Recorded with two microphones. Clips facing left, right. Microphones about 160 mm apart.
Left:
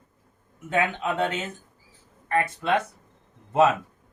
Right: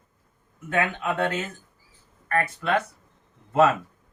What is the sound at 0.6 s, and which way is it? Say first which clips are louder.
A man's voice: even; 20° left (ahead or behind).